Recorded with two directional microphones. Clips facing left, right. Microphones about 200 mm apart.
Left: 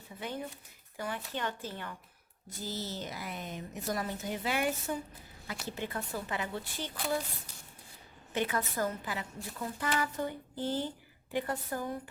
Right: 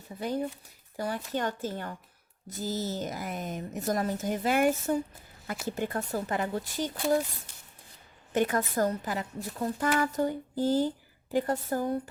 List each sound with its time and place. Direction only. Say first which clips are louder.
0.2 s a woman's voice: right 8 dB; 35° right (ahead or behind)
8.3 s a woman's voice: right 6 dB; 45° right (ahead or behind)